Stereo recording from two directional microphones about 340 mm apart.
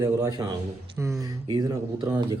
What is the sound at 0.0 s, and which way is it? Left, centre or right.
Speech, centre.